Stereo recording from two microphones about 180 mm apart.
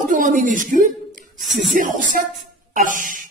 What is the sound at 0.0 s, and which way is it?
A man's voice, 45° right (ahead or behind).